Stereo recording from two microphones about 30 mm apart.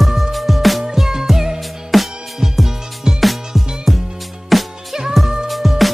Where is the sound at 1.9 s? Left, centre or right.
Centre.